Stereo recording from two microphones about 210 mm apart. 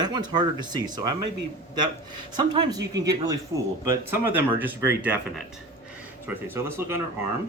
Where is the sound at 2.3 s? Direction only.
20° right (ahead or behind).